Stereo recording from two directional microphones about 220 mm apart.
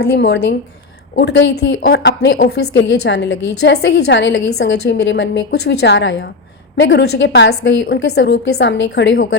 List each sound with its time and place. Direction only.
0.0 s a woman's voice: 50° left (ahead or behind)